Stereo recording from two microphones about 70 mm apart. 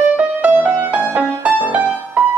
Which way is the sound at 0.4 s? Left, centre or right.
Right.